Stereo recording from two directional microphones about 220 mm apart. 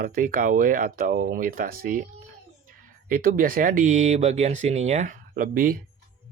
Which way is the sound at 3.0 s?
40° right (ahead or behind).